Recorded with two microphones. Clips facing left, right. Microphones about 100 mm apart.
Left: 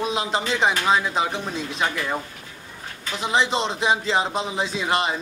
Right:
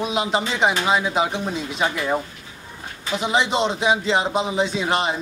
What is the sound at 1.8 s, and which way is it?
Speech, 15° right (ahead or behind).